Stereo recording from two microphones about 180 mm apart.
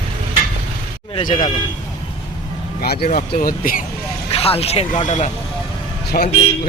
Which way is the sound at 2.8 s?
55° left (ahead or behind).